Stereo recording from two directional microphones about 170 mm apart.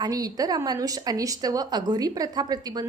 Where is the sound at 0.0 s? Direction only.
20° right (ahead or behind).